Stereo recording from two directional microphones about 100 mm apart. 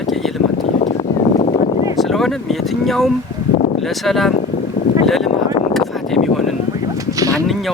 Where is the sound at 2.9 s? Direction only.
5° left (ahead or behind).